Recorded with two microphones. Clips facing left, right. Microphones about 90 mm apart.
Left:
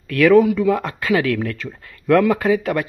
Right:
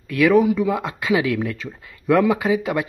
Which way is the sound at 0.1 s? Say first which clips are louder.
Left 3 dB; 20° right (ahead or behind).